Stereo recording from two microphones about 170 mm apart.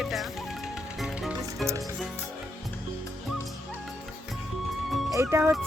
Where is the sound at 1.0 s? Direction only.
Centre (ahead or behind).